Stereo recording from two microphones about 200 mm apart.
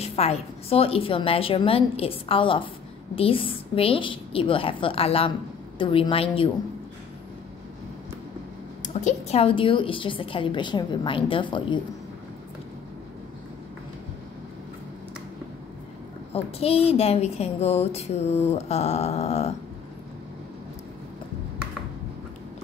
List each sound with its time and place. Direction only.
0.0 s a woman's voice: 30° left (ahead or behind)
8.8 s a woman's voice: 35° left (ahead or behind)
16.3 s a woman's voice: 30° left (ahead or behind)